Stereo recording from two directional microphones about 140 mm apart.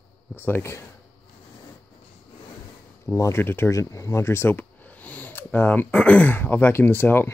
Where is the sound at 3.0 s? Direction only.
20° left (ahead or behind).